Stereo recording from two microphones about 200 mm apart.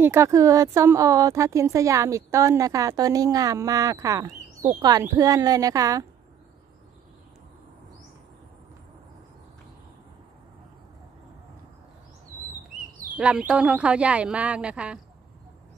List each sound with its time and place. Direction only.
0.0 s speech: 15° right (ahead or behind)
13.1 s speech: 5° right (ahead or behind)